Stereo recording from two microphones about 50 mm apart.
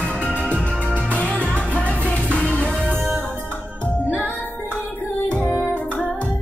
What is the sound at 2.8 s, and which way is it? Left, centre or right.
Music, right.